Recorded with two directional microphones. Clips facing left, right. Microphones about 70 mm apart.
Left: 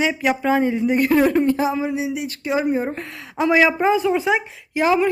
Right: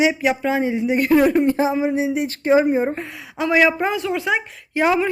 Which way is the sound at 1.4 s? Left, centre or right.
Right.